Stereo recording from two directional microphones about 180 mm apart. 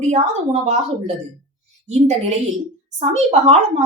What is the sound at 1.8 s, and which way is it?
A woman's voice, 40° right (ahead or behind).